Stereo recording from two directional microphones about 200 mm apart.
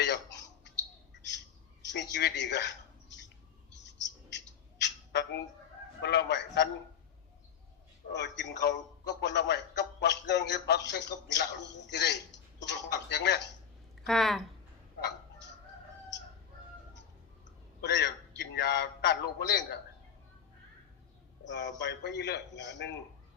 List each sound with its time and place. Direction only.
0.0 s a sound: 60° left (ahead or behind)
1.9 s a sound: 60° left (ahead or behind)
6.0 s a man's voice: 55° left (ahead or behind)
8.1 s a man's voice: 60° left (ahead or behind)
14.1 s speech: centre (ahead or behind)
17.7 s a man's voice: 55° left (ahead or behind)
21.4 s a man's voice: 60° left (ahead or behind)